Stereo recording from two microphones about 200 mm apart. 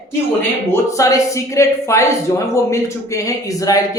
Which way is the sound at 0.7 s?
15° left (ahead or behind).